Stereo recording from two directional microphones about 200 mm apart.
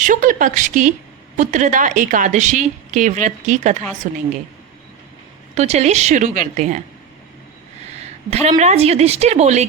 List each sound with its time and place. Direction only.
0.0 s a woman's voice: 40° right (ahead or behind)
5.5 s a woman's voice: 35° right (ahead or behind)
8.3 s a woman's voice: 35° right (ahead or behind)